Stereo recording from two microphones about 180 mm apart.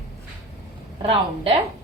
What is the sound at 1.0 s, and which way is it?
Speech, 35° right (ahead or behind).